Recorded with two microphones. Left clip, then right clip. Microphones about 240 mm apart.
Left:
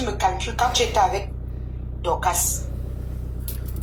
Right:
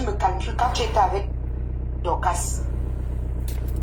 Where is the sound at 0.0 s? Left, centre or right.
Left.